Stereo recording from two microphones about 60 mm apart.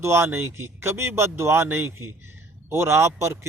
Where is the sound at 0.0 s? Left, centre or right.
Right.